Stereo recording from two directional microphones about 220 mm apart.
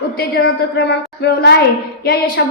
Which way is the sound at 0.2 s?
45° left (ahead or behind).